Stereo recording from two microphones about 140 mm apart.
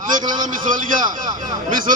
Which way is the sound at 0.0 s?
70° right (ahead or behind).